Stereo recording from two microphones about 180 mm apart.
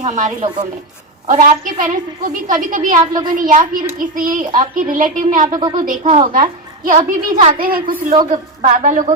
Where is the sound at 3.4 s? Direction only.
50° right (ahead or behind).